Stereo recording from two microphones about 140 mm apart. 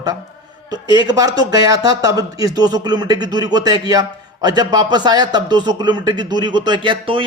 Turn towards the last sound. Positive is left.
turn(degrees=-40)  # may be behind; listen again after turning